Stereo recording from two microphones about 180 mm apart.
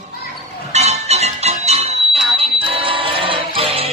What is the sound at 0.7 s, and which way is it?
Music, 35° right (ahead or behind).